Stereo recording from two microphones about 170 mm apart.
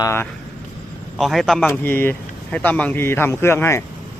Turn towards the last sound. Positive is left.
turn(degrees=15)  # may be behind; listen again after turning